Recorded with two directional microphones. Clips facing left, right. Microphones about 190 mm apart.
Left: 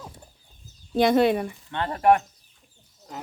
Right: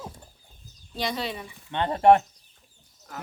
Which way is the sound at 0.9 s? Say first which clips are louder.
Left 12 dB; 55° left (ahead or behind).